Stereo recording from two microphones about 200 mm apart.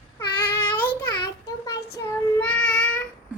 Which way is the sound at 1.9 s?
5° left (ahead or behind).